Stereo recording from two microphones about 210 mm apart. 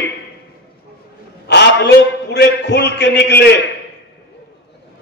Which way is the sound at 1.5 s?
55° left (ahead or behind).